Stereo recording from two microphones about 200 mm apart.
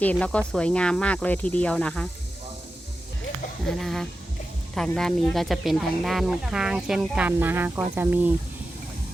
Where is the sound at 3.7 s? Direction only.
Centre (ahead or behind).